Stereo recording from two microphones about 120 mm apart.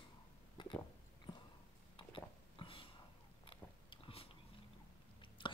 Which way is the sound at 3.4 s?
50° left (ahead or behind).